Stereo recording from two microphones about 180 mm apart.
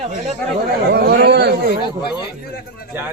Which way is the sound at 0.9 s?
60° right (ahead or behind).